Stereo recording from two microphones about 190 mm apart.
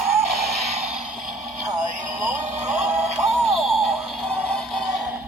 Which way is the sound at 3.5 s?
Centre (ahead or behind).